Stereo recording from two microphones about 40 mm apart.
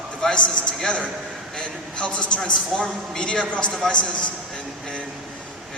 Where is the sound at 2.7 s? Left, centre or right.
Centre.